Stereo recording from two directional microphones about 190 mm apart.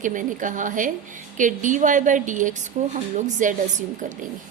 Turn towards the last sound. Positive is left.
turn(degrees=-40)  # may be behind; listen again after turning